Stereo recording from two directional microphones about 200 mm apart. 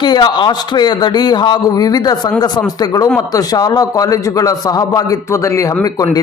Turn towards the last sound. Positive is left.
turn(degrees=15)  # may be behind; listen again after turning